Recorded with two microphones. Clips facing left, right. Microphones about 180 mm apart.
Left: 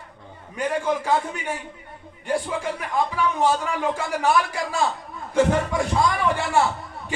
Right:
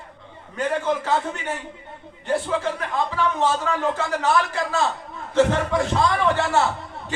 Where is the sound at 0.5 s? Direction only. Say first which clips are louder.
Right 1 dB; 10° left (ahead or behind).